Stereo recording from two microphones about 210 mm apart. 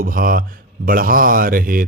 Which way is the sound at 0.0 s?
45° right (ahead or behind).